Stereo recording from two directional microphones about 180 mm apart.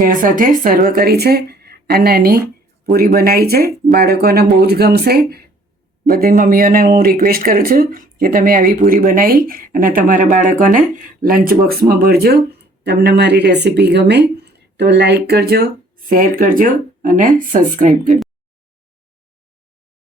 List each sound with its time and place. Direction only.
0.0 s speech: 50° right (ahead or behind)
16.0 s speech: 50° right (ahead or behind)